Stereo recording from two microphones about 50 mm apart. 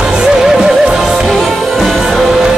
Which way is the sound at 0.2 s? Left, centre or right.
Centre.